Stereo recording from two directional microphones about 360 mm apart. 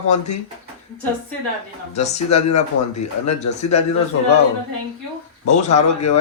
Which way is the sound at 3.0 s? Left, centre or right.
Left.